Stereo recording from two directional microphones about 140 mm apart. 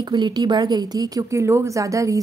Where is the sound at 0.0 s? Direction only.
30° right (ahead or behind).